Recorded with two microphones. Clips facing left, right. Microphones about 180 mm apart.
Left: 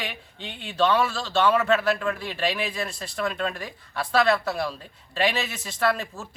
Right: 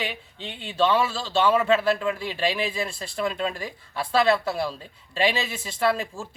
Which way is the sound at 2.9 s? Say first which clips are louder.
Right 1 dB; 30° right (ahead or behind).